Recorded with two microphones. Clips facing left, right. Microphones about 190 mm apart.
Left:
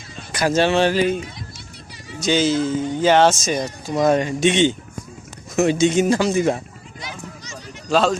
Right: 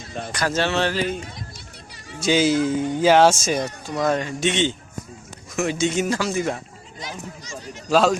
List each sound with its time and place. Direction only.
0.3 s speech: 15° left (ahead or behind)
2.2 s speech: 10° right (ahead or behind)
3.9 s speech: 20° left (ahead or behind)
7.9 s a man's voice: 5° right (ahead or behind)